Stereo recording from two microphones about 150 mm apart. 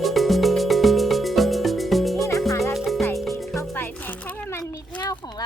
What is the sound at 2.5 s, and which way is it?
Music, 20° left (ahead or behind).